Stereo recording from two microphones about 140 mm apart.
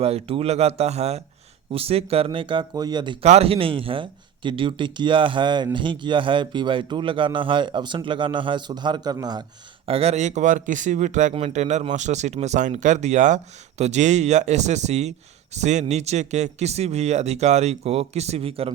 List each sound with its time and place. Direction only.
0.0 s a man's voice: 45° right (ahead or behind)
3.2 s a man's voice: 45° right (ahead or behind); by 9.4 s 30° right (ahead or behind)
9.8 s speech: 45° right (ahead or behind)